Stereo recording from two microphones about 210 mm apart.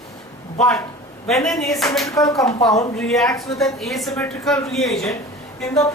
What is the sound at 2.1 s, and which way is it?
Speech, 15° left (ahead or behind).